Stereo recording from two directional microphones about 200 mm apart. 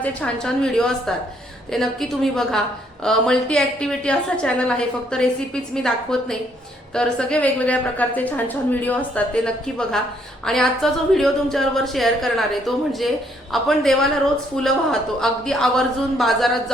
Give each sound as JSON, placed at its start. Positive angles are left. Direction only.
{"t": 0.0, "sound": "a woman's voice", "side_deg": 5}